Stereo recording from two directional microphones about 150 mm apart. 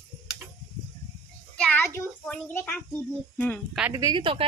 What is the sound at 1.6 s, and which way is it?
A child's voice, 10° left (ahead or behind).